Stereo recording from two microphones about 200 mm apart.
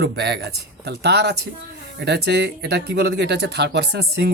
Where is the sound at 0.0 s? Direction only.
55° right (ahead or behind).